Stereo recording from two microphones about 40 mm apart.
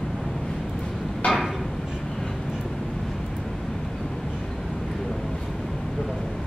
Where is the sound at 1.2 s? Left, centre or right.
Left.